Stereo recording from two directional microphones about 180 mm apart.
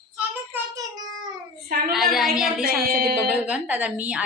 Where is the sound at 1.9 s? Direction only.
Centre (ahead or behind).